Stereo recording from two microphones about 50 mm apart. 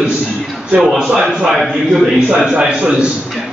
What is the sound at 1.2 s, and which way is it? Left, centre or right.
A man's voice, centre.